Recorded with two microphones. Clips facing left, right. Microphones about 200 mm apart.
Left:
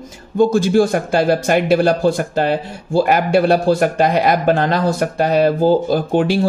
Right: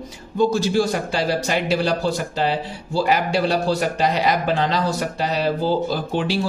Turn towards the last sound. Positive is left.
turn(degrees=50)  # may be behind; listen again after turning